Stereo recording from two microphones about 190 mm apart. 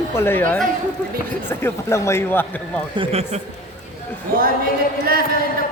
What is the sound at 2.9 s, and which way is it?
Speech, 30° right (ahead or behind).